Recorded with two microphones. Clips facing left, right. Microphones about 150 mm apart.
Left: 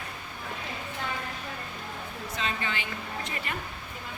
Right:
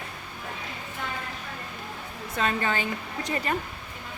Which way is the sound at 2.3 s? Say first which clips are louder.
Right 7 dB; 50° right (ahead or behind).